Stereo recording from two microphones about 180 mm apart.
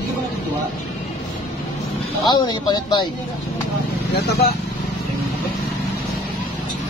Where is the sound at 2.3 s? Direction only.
25° left (ahead or behind).